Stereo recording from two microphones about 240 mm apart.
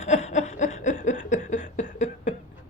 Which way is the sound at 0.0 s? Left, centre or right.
Left.